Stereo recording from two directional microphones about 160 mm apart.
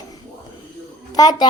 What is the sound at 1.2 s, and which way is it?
Speech, 25° left (ahead or behind).